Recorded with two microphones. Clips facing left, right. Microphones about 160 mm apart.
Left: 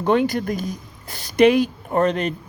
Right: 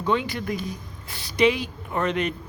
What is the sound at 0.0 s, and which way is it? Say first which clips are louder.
Speech: left 6 dB; 50° left (ahead or behind).